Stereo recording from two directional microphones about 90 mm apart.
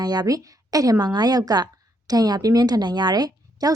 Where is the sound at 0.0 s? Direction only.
50° right (ahead or behind).